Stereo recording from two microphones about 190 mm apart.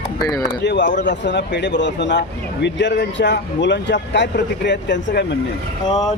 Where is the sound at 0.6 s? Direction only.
70° left (ahead or behind).